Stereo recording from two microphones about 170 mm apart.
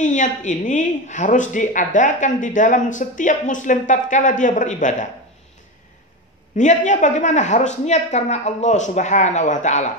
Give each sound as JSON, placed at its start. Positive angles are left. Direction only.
{"t": 0.0, "sound": "a woman's voice", "side_deg": 45}
{"t": 6.5, "sound": "a woman's voice", "side_deg": 45}